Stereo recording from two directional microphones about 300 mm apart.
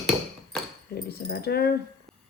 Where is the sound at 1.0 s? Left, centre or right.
Left.